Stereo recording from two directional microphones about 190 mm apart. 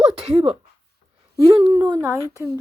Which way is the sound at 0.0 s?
30° right (ahead or behind).